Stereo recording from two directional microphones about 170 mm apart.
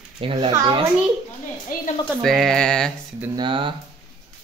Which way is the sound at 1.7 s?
55° left (ahead or behind).